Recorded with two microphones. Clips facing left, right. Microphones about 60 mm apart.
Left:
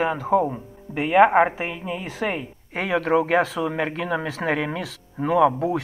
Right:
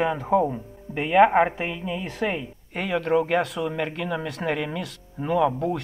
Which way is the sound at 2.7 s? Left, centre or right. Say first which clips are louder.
Left 2 dB; left.